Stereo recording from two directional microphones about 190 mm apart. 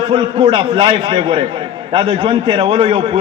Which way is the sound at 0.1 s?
30° right (ahead or behind).